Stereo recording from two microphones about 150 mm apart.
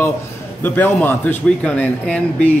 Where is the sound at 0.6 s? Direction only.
15° left (ahead or behind).